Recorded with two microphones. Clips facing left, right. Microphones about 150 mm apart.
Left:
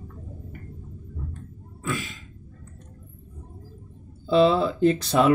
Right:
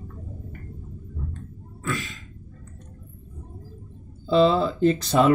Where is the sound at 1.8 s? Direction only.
10° left (ahead or behind).